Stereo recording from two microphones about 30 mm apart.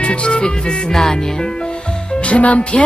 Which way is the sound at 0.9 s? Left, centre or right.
Centre.